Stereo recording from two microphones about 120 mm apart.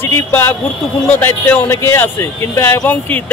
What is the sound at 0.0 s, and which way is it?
Speech, 20° left (ahead or behind).